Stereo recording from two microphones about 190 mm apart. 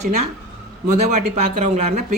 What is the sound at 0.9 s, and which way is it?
Speech, 40° right (ahead or behind).